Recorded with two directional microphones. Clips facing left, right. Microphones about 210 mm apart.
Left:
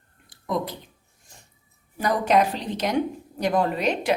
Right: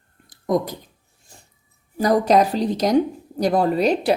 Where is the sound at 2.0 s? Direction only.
35° right (ahead or behind).